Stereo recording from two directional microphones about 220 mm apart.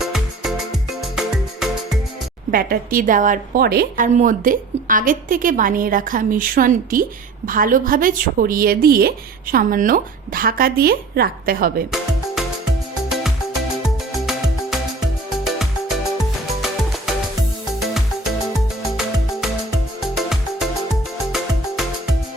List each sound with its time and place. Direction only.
0.0 s music: centre (ahead or behind)
2.5 s a woman's voice: 40° right (ahead or behind)
11.9 s music: centre (ahead or behind)
13.8 s music: centre (ahead or behind)
17.7 s music: centre (ahead or behind)
20.0 s music: centre (ahead or behind)